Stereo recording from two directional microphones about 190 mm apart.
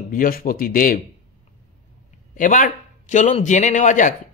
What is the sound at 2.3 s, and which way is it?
A man's voice, 45° left (ahead or behind).